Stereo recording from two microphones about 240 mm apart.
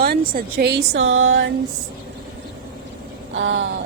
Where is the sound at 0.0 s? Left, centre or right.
Right.